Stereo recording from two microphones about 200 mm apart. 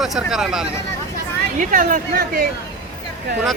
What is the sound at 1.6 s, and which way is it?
Speech, 40° right (ahead or behind).